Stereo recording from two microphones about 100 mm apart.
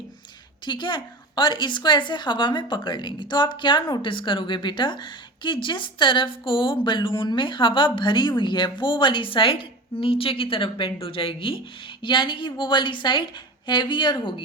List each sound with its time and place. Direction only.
0.6 s a woman's voice: 50° left (ahead or behind)
12.0 s a woman's voice: 55° left (ahead or behind)